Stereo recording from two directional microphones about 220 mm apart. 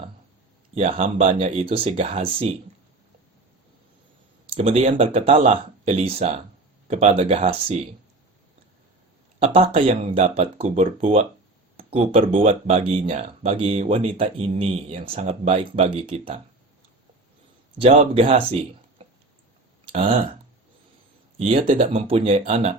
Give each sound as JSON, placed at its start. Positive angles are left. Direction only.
{"t": 0.8, "sound": "speech", "side_deg": -30}
{"t": 4.4, "sound": "speech", "side_deg": -25}
{"t": 9.4, "sound": "speech", "side_deg": -25}
{"t": 17.7, "sound": "speech", "side_deg": -25}
{"t": 21.3, "sound": "speech", "side_deg": -25}